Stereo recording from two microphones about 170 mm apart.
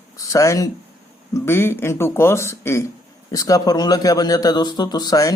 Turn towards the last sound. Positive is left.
turn(degrees=20)  # may be behind; listen again after turning